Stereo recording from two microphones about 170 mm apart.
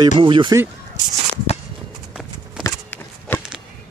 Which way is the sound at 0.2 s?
30° right (ahead or behind).